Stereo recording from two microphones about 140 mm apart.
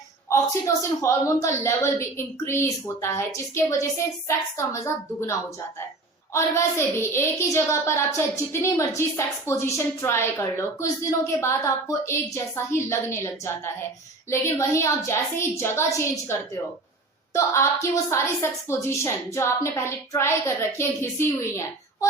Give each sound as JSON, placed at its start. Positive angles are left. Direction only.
{"t": 0.3, "sound": "a woman's voice", "side_deg": 20}
{"t": 6.3, "sound": "a woman's voice", "side_deg": 20}
{"t": 17.3, "sound": "a woman's voice", "side_deg": 20}